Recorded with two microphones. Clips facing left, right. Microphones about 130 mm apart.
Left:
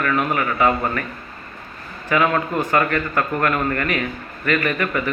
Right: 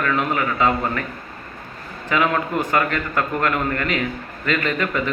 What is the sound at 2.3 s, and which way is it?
A man's voice, 20° right (ahead or behind).